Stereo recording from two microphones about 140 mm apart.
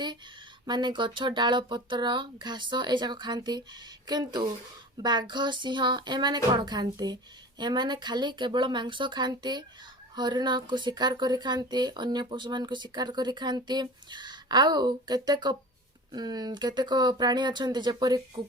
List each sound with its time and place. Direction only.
0.6 s speech: 30° right (ahead or behind)